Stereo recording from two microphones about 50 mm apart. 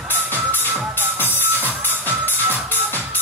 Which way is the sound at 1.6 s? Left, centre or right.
Right.